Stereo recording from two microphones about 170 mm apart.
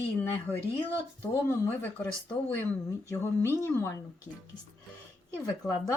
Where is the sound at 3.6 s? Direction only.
15° left (ahead or behind).